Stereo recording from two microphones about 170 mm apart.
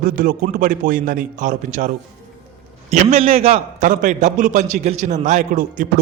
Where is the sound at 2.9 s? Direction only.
40° right (ahead or behind).